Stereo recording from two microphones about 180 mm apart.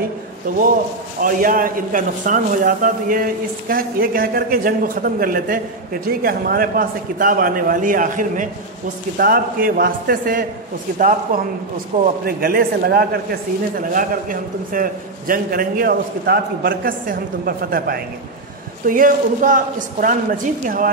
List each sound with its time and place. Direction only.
0.5 s a man's voice: 50° right (ahead or behind)